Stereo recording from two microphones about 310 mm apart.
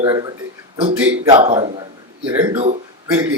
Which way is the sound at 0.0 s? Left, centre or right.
Centre.